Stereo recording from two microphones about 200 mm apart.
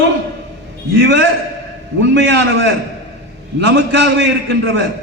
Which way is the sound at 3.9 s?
65° right (ahead or behind).